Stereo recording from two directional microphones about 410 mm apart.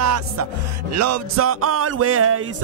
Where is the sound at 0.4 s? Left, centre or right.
Right.